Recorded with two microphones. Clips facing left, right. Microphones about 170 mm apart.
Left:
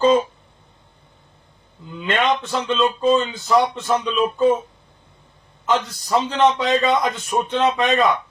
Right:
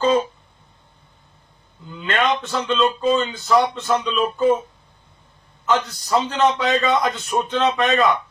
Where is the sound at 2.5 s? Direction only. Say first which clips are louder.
Even; 15° left (ahead or behind).